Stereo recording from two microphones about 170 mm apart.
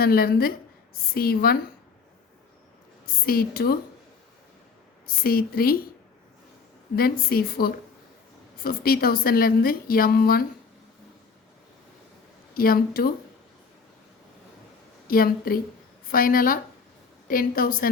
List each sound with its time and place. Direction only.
0.0 s a woman's voice: 60° left (ahead or behind)
3.2 s a woman's voice: 65° left (ahead or behind)
5.0 s a woman's voice: 60° left (ahead or behind)
6.9 s a woman's voice: 60° left (ahead or behind)
12.5 s a woman's voice: 60° left (ahead or behind)
15.0 s a woman's voice: 60° left (ahead or behind)